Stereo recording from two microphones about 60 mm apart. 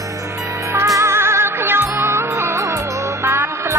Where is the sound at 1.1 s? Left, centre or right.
Right.